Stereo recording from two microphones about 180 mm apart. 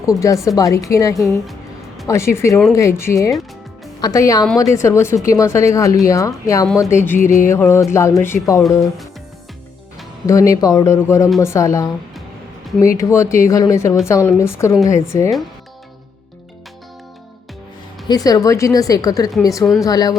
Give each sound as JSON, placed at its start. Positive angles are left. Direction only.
{"t": 0.0, "sound": "a woman's voice", "side_deg": 20}
{"t": 10.2, "sound": "speech", "side_deg": 20}
{"t": 13.0, "sound": "speech", "side_deg": 15}
{"t": 18.1, "sound": "a woman's voice", "side_deg": 20}